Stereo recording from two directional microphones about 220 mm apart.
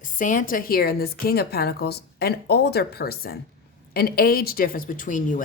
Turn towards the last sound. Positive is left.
turn(degrees=35)  # may be behind; listen again after turning